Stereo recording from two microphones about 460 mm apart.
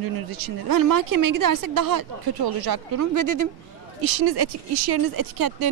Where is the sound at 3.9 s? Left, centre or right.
Right.